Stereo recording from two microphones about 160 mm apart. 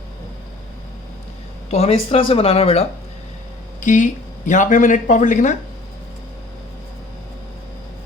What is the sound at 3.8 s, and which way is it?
Speech, 50° left (ahead or behind).